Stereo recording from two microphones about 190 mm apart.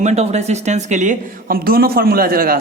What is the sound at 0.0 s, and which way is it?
Speech, 35° right (ahead or behind).